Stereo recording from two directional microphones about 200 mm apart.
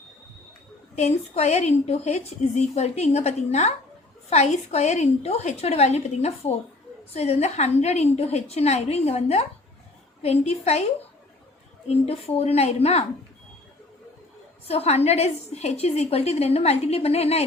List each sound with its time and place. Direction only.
0.9 s a woman's voice: 35° left (ahead or behind)
11.9 s a woman's voice: 30° left (ahead or behind)
14.7 s a woman's voice: 30° left (ahead or behind)